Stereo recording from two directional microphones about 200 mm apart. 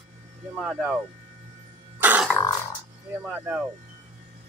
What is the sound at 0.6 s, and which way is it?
Speech, 5° right (ahead or behind).